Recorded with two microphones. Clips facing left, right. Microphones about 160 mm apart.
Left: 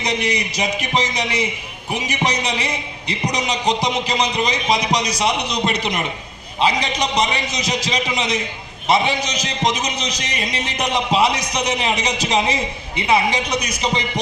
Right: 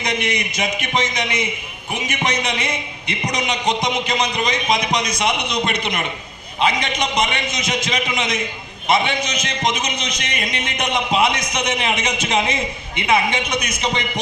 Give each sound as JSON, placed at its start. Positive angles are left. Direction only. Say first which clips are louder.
{"t": 0.0, "sound": "a man's voice", "louder": "left 1 dB", "side_deg": 35}